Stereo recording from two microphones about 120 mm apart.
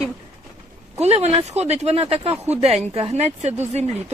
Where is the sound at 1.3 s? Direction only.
60° right (ahead or behind).